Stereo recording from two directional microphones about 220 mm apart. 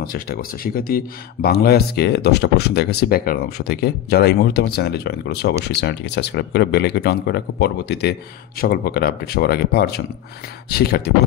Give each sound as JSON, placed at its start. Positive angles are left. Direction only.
{"t": 0.0, "sound": "speech", "side_deg": 40}